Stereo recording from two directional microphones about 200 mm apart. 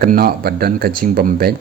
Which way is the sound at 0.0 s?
50° right (ahead or behind).